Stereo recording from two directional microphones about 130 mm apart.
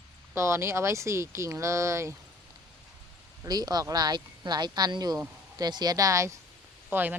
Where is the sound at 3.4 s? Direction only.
30° right (ahead or behind).